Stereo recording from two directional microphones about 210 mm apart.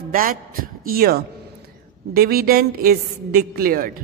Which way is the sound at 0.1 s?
40° right (ahead or behind).